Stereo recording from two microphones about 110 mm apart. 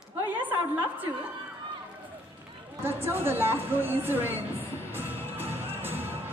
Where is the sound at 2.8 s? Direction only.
20° right (ahead or behind).